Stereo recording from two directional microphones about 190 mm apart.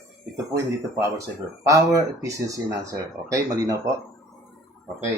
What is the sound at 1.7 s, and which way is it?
Speech, 15° right (ahead or behind).